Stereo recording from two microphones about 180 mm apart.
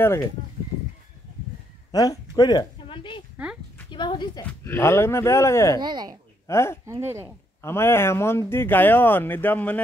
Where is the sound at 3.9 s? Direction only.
25° left (ahead or behind).